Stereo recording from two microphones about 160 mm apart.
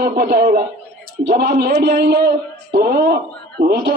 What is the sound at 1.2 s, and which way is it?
A man's voice, 90° right.